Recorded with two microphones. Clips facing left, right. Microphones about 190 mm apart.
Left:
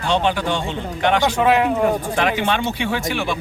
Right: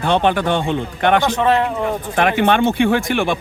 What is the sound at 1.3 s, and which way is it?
Speech, 10° left (ahead or behind).